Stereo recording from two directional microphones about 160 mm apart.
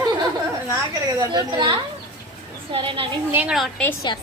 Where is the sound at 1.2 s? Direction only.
25° right (ahead or behind).